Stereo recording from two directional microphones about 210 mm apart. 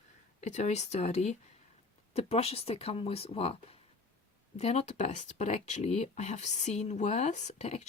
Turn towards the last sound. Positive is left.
turn(degrees=30)  # may be behind; listen again after turning